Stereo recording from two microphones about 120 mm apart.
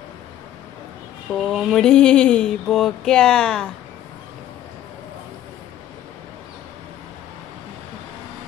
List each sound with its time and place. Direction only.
1.5 s mantra: centre (ahead or behind)
1.9 s speech: 5° left (ahead or behind)